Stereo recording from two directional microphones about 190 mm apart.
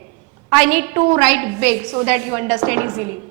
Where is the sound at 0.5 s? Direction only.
10° right (ahead or behind).